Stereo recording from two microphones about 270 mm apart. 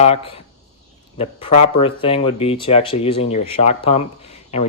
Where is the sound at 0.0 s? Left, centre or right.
Left.